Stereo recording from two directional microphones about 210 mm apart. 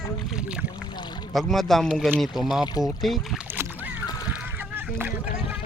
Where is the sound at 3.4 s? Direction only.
10° right (ahead or behind).